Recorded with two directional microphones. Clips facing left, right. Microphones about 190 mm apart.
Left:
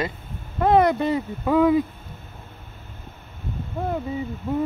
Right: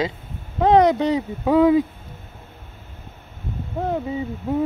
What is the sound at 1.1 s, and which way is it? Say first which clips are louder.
Speech: right 3 dB; 15° right (ahead or behind).